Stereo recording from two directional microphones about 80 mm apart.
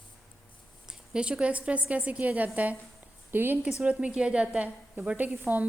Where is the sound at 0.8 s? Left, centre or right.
Centre; by 3.6 s right.